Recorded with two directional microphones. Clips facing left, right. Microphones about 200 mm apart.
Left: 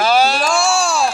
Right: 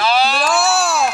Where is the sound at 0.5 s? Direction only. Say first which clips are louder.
Even; 5° right (ahead or behind).